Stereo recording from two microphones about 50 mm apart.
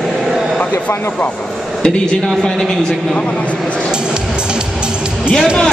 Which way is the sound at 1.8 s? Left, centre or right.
Centre.